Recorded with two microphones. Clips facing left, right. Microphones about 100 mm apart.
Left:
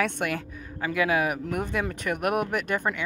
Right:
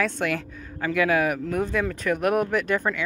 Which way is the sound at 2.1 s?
30° left (ahead or behind).